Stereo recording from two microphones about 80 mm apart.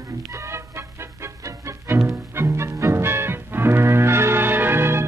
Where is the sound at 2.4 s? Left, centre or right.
Right.